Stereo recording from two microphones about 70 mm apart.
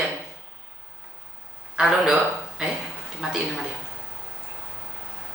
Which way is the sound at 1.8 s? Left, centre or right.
Centre.